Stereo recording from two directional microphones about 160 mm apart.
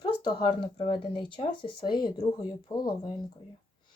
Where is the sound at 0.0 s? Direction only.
25° left (ahead or behind).